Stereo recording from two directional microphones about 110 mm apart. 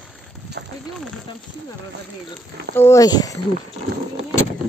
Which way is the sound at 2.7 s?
20° left (ahead or behind).